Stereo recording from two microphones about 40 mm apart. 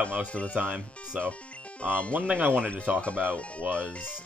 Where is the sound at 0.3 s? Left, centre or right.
Left.